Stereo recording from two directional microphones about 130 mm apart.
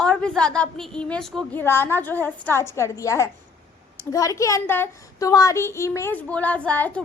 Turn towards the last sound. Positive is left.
turn(degrees=10)  # may be behind; listen again after turning